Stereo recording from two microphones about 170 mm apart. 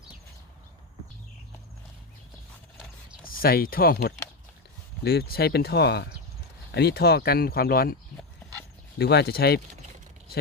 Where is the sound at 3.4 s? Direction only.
60° left (ahead or behind).